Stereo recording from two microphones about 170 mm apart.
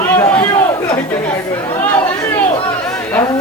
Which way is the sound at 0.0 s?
10° left (ahead or behind).